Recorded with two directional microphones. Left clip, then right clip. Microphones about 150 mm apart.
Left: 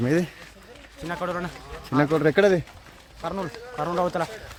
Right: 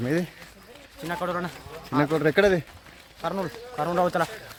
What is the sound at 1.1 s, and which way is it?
Speech, 5° left (ahead or behind).